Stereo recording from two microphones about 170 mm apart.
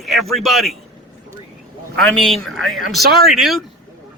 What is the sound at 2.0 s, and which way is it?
Speech, centre (ahead or behind).